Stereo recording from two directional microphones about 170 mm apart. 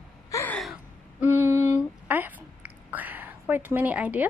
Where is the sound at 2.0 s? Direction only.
10° right (ahead or behind).